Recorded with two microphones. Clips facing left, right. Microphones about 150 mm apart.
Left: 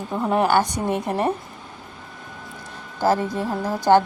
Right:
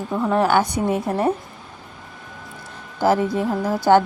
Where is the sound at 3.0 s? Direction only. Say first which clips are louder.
Right 2 dB; 10° right (ahead or behind).